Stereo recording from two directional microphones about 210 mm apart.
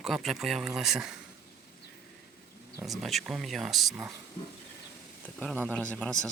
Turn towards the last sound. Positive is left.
turn(degrees=5)  # may be behind; listen again after turning